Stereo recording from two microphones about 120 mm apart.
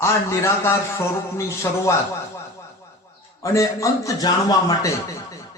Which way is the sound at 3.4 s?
25° left (ahead or behind).